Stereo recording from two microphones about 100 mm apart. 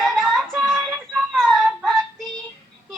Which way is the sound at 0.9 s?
15° right (ahead or behind).